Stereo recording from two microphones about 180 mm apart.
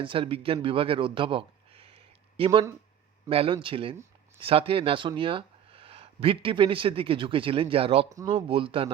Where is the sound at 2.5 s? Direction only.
20° right (ahead or behind).